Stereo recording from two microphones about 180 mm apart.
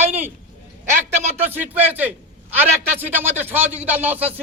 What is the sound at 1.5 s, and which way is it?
Speech, 10° right (ahead or behind).